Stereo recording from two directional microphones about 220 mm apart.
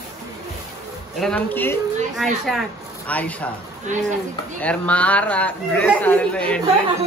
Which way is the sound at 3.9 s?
35° right (ahead or behind).